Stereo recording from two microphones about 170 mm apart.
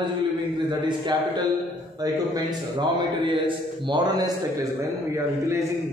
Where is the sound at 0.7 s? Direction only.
25° right (ahead or behind).